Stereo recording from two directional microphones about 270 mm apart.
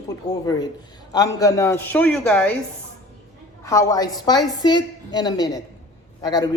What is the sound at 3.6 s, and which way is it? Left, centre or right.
Speech, centre.